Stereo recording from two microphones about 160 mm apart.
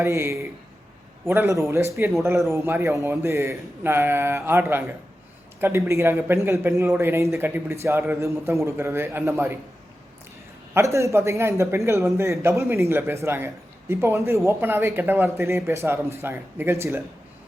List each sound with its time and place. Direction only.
0.0 s speech: 15° right (ahead or behind)
10.8 s speech: 20° right (ahead or behind)